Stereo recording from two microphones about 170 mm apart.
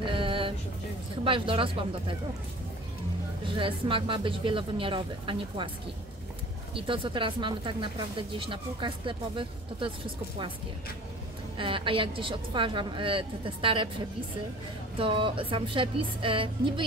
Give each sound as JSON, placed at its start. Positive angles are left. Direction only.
{"t": 0.0, "sound": "a sound", "side_deg": -30}
{"t": 1.2, "sound": "a woman's voice", "side_deg": -30}
{"t": 3.4, "sound": "speech", "side_deg": -30}
{"t": 6.7, "sound": "speech", "side_deg": -30}
{"t": 11.5, "sound": "a woman's voice", "side_deg": -30}
{"t": 15.0, "sound": "a woman's voice", "side_deg": -30}